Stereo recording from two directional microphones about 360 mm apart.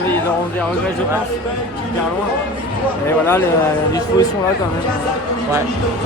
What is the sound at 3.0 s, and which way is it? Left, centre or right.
Speech, centre.